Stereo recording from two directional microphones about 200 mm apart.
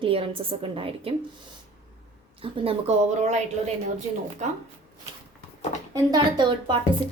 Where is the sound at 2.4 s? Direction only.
25° right (ahead or behind).